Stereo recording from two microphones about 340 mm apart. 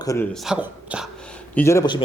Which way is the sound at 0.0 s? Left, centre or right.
Centre.